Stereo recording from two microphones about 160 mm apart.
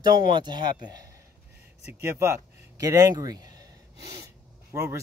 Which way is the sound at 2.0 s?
15° right (ahead or behind).